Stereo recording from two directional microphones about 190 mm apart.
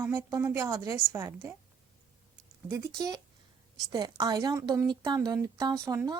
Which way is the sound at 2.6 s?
15° right (ahead or behind).